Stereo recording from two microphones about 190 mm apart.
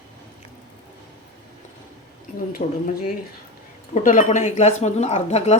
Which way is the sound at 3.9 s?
40° left (ahead or behind).